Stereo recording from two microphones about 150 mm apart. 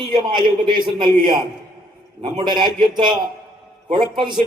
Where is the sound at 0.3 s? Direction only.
30° right (ahead or behind).